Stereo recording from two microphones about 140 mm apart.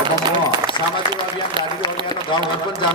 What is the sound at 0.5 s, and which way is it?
A man's voice, 35° right (ahead or behind).